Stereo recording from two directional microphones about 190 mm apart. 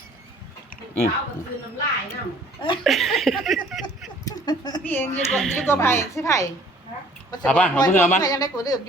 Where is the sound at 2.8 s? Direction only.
Centre (ahead or behind).